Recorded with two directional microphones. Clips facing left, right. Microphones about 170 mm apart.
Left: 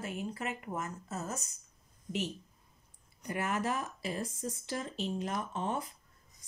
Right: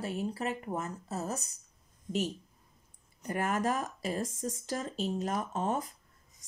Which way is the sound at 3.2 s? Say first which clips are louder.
Right 3 dB; 45° right (ahead or behind).